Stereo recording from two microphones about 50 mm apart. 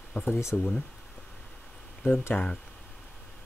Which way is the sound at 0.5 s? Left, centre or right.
Centre.